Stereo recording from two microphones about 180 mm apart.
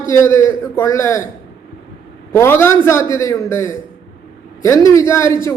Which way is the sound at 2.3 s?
15° left (ahead or behind).